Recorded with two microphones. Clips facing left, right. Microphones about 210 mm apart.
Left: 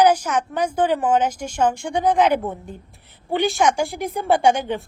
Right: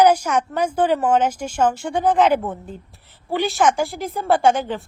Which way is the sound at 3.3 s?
Centre (ahead or behind).